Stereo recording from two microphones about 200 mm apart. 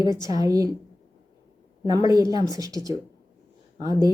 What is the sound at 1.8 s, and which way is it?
Speech, 20° right (ahead or behind).